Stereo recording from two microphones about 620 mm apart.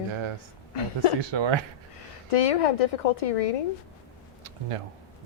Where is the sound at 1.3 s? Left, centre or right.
Right.